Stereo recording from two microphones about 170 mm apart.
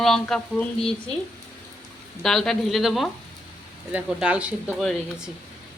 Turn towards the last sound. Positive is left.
turn(degrees=0)  # may be behind; listen again after turning